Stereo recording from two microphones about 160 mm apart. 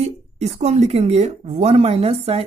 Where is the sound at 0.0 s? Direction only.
40° right (ahead or behind).